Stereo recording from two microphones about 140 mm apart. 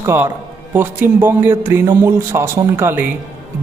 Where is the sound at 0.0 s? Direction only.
15° right (ahead or behind).